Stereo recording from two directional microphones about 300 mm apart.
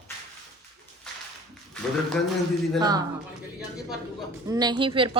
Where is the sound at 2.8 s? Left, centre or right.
Centre.